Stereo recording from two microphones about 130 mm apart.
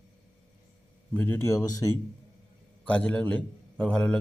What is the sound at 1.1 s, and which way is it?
Speech, 15° left (ahead or behind).